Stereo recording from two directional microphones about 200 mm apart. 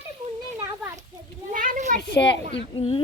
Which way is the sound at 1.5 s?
40° right (ahead or behind).